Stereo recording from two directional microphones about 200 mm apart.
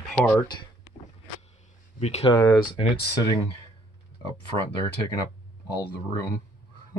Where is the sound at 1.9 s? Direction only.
30° left (ahead or behind).